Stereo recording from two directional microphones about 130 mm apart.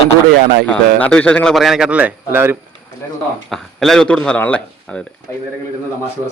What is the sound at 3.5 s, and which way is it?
Speech, 5° left (ahead or behind).